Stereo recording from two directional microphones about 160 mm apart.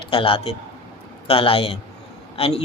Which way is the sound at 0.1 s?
35° left (ahead or behind).